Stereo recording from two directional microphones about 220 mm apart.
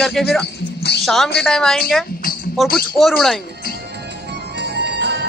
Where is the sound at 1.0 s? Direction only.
Centre (ahead or behind).